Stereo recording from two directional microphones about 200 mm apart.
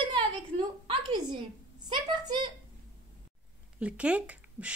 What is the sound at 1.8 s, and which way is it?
Speech, 20° right (ahead or behind).